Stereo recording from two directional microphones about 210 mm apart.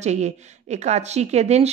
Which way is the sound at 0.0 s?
35° right (ahead or behind).